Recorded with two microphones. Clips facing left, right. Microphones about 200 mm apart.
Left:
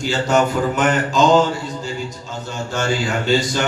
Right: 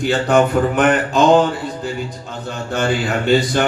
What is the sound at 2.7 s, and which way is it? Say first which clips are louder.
Speech: right 2 dB; 55° right (ahead or behind).